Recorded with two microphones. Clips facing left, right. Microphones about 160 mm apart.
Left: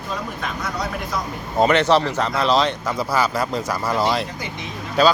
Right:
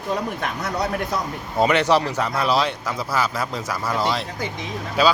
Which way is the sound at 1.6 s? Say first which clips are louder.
Left 2 dB; 10° right (ahead or behind).